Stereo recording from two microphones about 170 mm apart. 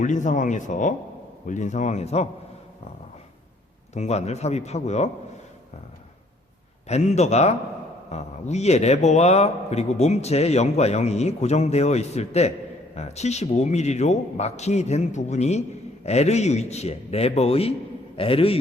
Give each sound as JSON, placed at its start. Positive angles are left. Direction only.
{"t": 0.0, "sound": "speech", "side_deg": 45}
{"t": 3.9, "sound": "a man's voice", "side_deg": 40}
{"t": 6.8, "sound": "a man's voice", "side_deg": 40}